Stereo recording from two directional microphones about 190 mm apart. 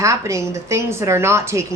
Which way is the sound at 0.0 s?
15° right (ahead or behind).